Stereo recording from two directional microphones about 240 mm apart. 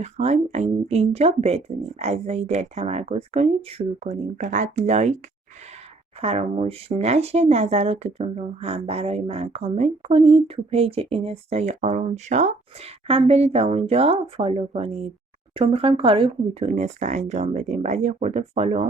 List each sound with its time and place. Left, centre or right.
0.0 s speech: right
6.2 s speech: right